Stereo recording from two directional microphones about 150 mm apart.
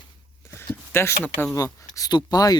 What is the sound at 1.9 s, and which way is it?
Speech, 25° left (ahead or behind).